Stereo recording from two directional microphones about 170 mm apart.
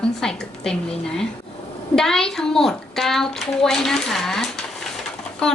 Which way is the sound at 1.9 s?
5° left (ahead or behind).